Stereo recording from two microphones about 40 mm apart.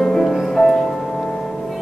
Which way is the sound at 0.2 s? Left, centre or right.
Centre.